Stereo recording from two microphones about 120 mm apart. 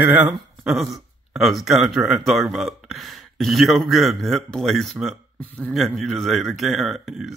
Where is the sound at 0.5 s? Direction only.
Centre (ahead or behind).